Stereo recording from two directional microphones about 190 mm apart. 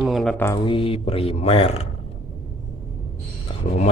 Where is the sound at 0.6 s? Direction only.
25° left (ahead or behind).